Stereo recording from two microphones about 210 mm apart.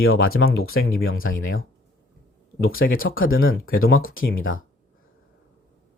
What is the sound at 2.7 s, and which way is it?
Speech, 45° left (ahead or behind).